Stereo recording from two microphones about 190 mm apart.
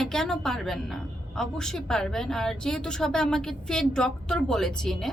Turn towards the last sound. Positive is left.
turn(degrees=0)  # may be behind; listen again after turning